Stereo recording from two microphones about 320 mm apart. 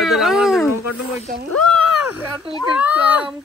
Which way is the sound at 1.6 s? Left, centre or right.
Left.